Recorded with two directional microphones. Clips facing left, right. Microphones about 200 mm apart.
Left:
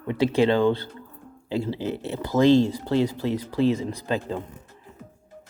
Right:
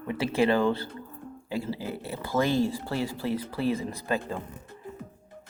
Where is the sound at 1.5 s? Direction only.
20° left (ahead or behind).